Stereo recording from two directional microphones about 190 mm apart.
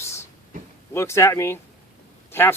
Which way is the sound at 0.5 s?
40° right (ahead or behind).